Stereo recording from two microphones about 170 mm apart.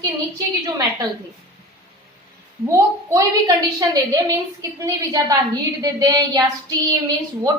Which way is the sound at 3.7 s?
20° right (ahead or behind).